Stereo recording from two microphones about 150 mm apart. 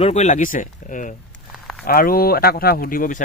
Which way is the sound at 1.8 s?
75° left (ahead or behind).